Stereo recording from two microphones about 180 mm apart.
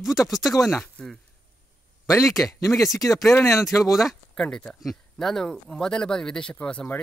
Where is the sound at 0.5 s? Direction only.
15° left (ahead or behind).